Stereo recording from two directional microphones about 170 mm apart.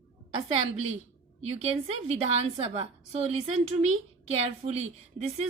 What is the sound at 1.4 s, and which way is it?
A woman's voice, 35° right (ahead or behind).